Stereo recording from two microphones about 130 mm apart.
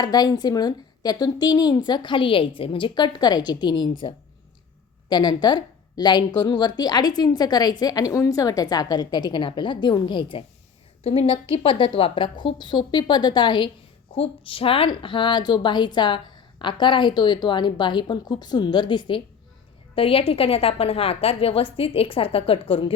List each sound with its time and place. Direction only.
0.0 s a woman's voice: 30° left (ahead or behind)
5.0 s a woman's voice: 35° left (ahead or behind)